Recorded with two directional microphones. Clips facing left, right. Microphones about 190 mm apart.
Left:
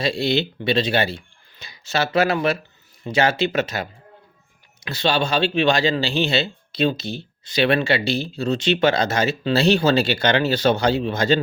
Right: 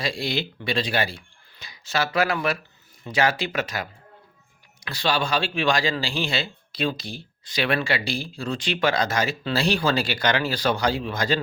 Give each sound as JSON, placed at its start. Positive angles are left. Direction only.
{"t": 0.0, "sound": "speech", "side_deg": 25}
{"t": 4.9, "sound": "speech", "side_deg": 25}